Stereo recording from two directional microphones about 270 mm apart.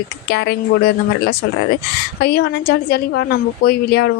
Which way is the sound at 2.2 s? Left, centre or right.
Left.